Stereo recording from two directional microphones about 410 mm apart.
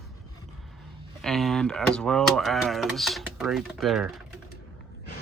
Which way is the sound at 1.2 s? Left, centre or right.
Centre.